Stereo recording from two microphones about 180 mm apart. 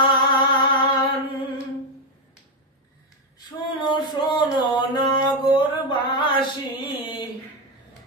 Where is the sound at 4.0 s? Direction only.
25° left (ahead or behind).